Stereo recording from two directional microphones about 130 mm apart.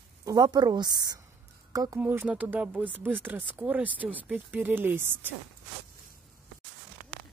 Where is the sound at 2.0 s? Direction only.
15° right (ahead or behind).